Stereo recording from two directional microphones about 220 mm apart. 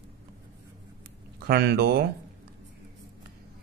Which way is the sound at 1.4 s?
45° right (ahead or behind).